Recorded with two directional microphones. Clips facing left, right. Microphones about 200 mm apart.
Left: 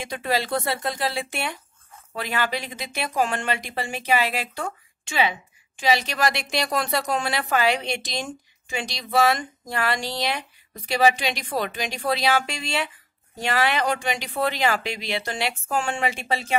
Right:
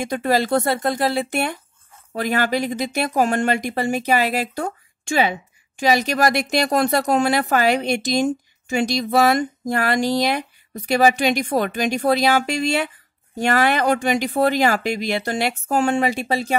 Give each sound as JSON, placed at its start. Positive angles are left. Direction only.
{"t": 0.0, "sound": "speech", "side_deg": -45}